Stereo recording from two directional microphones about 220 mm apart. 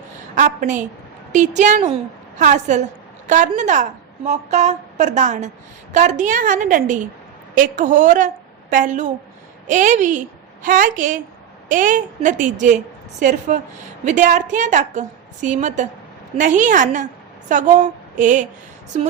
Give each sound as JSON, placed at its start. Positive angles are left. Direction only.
{"t": 0.3, "sound": "a woman's voice", "side_deg": -35}